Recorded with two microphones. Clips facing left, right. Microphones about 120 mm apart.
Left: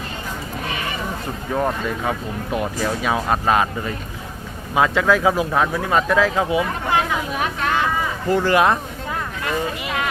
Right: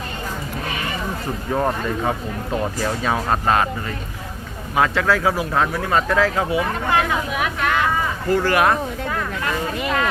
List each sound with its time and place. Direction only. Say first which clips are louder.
1.5 s speech: even; 5° right (ahead or behind)
2.5 s speech: even; 10° left (ahead or behind)
7.3 s a sound: left 1 dB; 35° left (ahead or behind)
8.3 s speech: left 1 dB; 20° left (ahead or behind)